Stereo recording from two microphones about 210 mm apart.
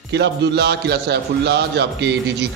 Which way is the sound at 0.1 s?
55° right (ahead or behind).